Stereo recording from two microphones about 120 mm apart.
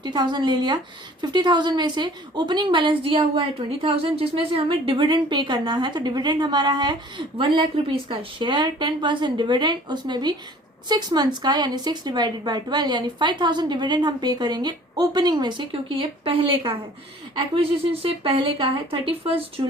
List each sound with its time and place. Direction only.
0.0 s a woman's voice: 40° right (ahead or behind)